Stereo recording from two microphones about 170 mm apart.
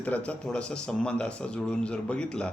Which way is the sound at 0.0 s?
10° left (ahead or behind).